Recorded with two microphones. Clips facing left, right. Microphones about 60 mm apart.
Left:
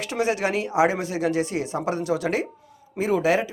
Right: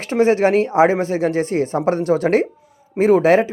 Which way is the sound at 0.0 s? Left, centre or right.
Right.